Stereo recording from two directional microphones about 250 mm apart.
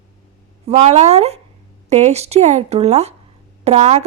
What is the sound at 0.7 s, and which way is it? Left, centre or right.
Speech, right.